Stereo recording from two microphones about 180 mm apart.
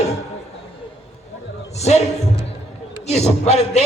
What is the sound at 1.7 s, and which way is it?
Speech, 40° left (ahead or behind).